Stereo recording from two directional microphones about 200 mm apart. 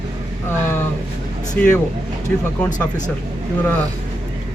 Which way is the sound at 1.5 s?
5° left (ahead or behind).